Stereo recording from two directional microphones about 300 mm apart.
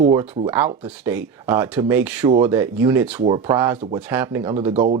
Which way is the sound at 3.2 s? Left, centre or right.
Centre.